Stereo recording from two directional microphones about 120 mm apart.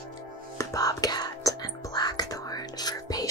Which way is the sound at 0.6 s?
30° left (ahead or behind).